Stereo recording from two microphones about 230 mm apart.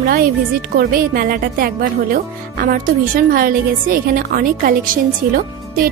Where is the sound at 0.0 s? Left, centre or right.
Right.